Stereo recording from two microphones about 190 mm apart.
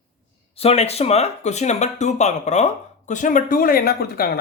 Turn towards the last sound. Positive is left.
turn(degrees=50)  # may be behind; listen again after turning